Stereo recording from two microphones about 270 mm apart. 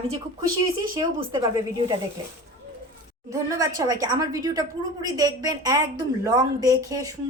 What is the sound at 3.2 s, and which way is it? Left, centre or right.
A woman's voice, centre.